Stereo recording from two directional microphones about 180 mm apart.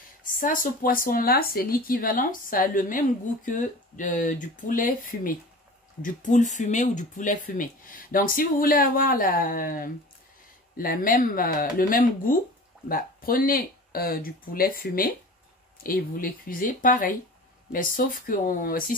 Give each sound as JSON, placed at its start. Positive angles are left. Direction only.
{"t": 0.4, "sound": "speech", "side_deg": 50}